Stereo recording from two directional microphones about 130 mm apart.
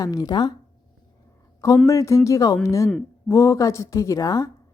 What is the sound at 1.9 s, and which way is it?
A woman's voice, 25° left (ahead or behind).